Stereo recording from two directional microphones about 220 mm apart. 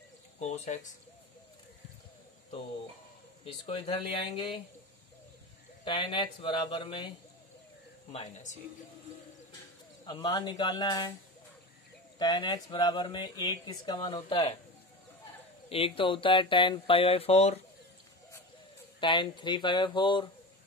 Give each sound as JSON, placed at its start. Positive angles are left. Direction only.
{"t": 0.4, "sound": "speech", "side_deg": 30}
{"t": 3.6, "sound": "speech", "side_deg": 25}
{"t": 5.9, "sound": "speech", "side_deg": 20}
{"t": 8.1, "sound": "speech", "side_deg": 30}
{"t": 10.0, "sound": "speech", "side_deg": 20}
{"t": 12.2, "sound": "speech", "side_deg": 20}
{"t": 15.7, "sound": "speech", "side_deg": 25}
{"t": 18.9, "sound": "speech", "side_deg": 20}